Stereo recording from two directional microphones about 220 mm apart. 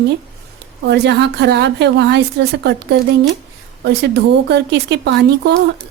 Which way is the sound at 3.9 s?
50° right (ahead or behind).